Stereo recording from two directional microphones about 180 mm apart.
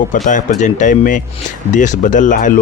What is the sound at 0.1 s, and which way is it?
Speech, 45° left (ahead or behind).